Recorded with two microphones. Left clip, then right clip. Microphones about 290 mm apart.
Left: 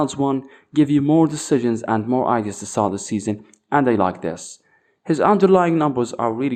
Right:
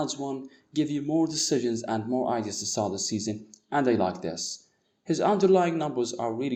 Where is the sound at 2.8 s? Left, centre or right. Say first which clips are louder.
Left 10 dB; left.